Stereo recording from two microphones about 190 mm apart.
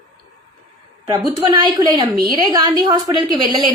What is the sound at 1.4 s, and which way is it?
Speech, 25° right (ahead or behind).